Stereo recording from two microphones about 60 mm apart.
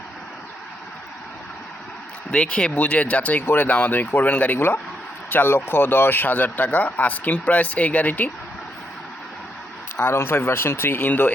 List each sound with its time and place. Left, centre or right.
2.3 s speech: centre
4.5 s speech: left
10.0 s speech: left